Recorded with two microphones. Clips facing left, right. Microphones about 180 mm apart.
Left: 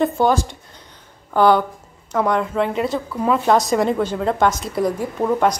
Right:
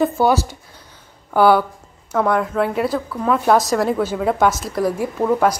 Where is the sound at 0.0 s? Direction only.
5° right (ahead or behind).